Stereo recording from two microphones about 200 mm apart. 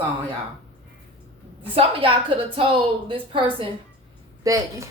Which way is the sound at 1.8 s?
25° right (ahead or behind).